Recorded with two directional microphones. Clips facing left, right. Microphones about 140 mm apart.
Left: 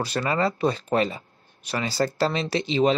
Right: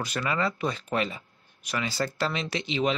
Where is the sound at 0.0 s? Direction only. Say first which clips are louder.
Left 4 dB; 35° left (ahead or behind).